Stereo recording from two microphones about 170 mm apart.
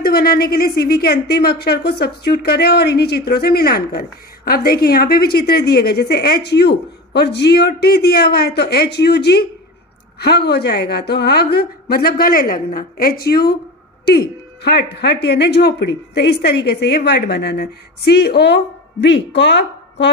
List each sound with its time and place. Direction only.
0.0 s a woman's voice: 65° left (ahead or behind); by 20.1 s 90° left